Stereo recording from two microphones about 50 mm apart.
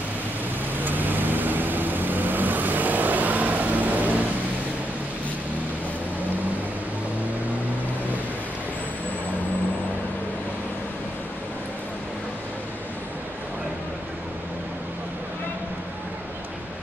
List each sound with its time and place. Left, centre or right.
0.8 s vehicle: right